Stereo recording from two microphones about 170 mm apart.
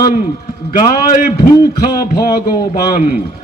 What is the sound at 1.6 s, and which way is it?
A man's voice, 25° left (ahead or behind).